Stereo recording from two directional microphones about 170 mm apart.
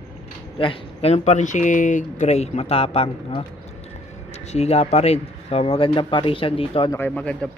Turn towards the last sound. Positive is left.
turn(degrees=5)  # may be behind; listen again after turning